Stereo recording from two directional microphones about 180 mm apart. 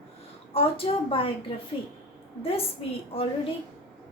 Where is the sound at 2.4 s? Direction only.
35° left (ahead or behind).